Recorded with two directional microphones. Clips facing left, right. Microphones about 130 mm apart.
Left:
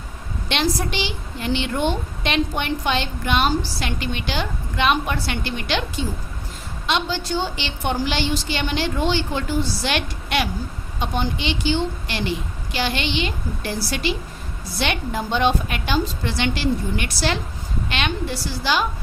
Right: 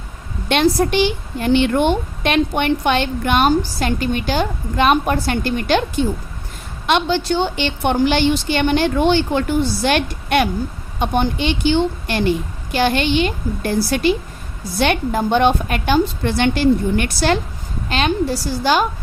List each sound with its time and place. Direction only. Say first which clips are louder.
0.4 s a woman's voice: right 8 dB; 50° right (ahead or behind)
6.8 s a woman's voice: right 6 dB; 60° right (ahead or behind)
17.8 s a woman's voice: right 7 dB; 40° right (ahead or behind)